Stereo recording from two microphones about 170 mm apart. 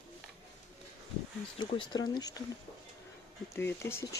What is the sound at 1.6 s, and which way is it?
Speech, 25° left (ahead or behind).